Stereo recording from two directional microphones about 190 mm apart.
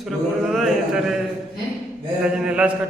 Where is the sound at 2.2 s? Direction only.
5° right (ahead or behind).